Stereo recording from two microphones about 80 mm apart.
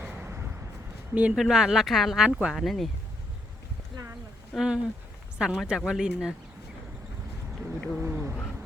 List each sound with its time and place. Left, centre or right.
0.0 s a sound: right
1.1 s speech: centre
4.5 s speech: centre
7.9 s speech: right